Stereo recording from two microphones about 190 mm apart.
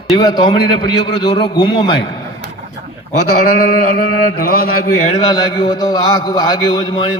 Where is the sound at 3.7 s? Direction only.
50° left (ahead or behind).